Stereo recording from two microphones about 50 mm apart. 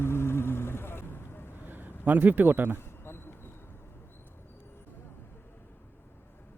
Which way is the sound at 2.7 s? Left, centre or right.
Left.